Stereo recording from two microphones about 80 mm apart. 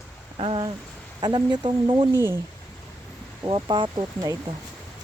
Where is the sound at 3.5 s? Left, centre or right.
Right.